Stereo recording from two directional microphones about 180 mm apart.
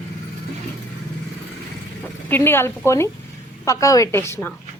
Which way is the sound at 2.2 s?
10° left (ahead or behind).